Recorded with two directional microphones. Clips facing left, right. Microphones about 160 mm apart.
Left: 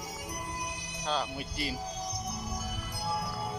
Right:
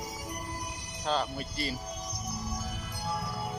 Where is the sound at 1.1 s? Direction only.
Centre (ahead or behind).